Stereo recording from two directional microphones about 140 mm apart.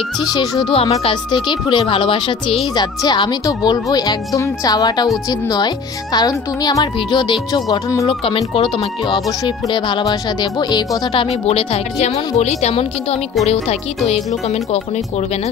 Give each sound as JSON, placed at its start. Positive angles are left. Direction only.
{"t": 0.2, "sound": "speech", "side_deg": 30}
{"t": 6.1, "sound": "speech", "side_deg": 30}
{"t": 11.4, "sound": "speech", "side_deg": 50}